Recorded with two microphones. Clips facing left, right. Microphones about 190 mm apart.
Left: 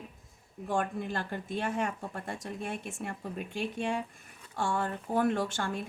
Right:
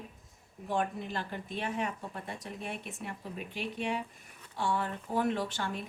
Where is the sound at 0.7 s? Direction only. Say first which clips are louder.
Left 1 dB; 50° left (ahead or behind).